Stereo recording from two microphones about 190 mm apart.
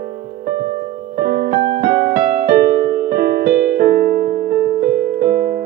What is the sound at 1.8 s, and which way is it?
Music, 50° right (ahead or behind).